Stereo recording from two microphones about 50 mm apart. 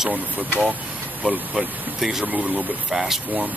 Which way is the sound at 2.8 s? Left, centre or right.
Centre.